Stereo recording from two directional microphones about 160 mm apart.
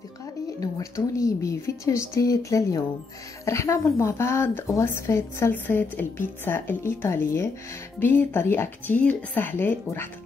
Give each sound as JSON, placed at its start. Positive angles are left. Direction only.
{"t": 0.6, "sound": "a woman's voice", "side_deg": 20}